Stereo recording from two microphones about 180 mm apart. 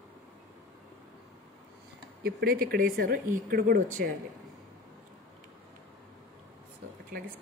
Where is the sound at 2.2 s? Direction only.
60° right (ahead or behind).